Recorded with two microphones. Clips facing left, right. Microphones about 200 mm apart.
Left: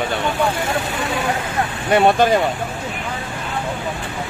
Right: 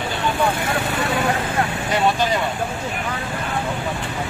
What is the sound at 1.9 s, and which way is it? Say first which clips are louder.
Speech: left 6 dB; 55° left (ahead or behind).